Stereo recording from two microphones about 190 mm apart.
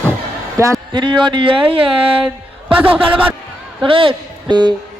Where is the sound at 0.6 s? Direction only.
15° right (ahead or behind).